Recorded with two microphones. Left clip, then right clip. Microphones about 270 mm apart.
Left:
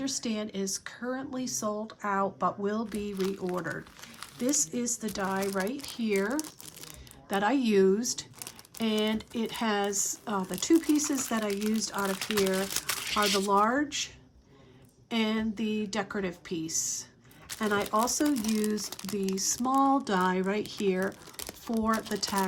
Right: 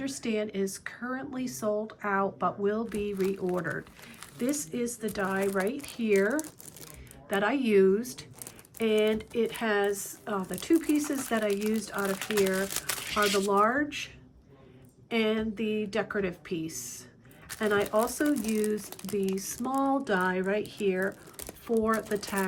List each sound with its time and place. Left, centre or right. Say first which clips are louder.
0.0 s speech: right 2 dB; centre
11.5 s speech: right 1 dB; centre
13.5 s speech: even; centre
15.1 s speech: right 2 dB; centre
18.9 s speech: right 2 dB; centre
19.4 s speech: left 4 dB; centre
21.3 s a sound: right 5 dB; centre
21.8 s speech: right 1 dB; centre